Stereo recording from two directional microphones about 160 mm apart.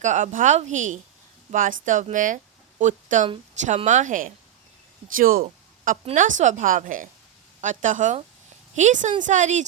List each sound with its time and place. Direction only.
0.0 s a woman's voice: 50° right (ahead or behind)